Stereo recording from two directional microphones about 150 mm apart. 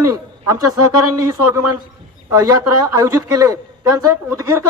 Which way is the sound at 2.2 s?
25° right (ahead or behind).